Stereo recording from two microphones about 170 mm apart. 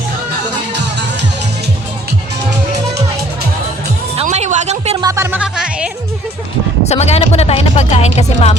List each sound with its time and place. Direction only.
4.2 s music: 40° right (ahead or behind)
4.9 s music: 20° right (ahead or behind)
6.8 s speech: 40° left (ahead or behind)